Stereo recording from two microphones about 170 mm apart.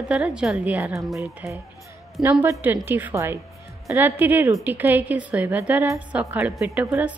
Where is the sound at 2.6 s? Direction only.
10° right (ahead or behind).